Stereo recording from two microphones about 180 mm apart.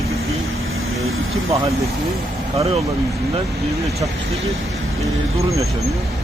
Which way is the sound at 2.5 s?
35° right (ahead or behind).